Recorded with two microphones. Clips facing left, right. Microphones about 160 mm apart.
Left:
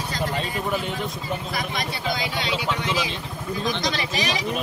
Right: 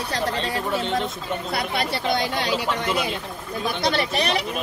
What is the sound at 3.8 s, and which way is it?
Speech, 60° right (ahead or behind).